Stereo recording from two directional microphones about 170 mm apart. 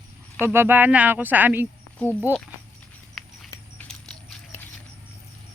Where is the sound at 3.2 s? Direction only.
Centre (ahead or behind).